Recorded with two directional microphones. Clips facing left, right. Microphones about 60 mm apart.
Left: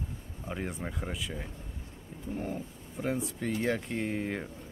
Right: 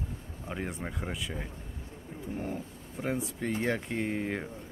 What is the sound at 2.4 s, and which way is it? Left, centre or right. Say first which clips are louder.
Speech: left 1 dB; centre.